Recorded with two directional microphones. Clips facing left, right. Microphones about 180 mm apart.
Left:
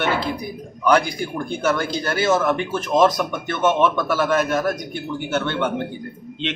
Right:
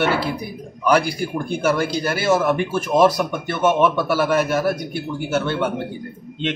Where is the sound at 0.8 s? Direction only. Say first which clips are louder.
Even; 10° right (ahead or behind).